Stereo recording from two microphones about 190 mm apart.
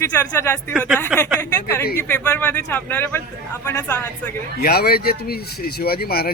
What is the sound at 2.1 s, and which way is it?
Speech, 10° left (ahead or behind).